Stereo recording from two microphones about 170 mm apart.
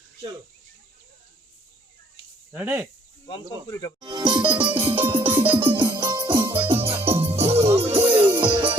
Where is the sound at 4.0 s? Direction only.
25° right (ahead or behind).